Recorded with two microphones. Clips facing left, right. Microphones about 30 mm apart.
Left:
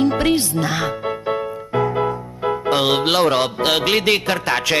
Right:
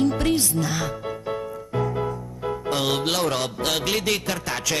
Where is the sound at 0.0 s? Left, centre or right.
Left.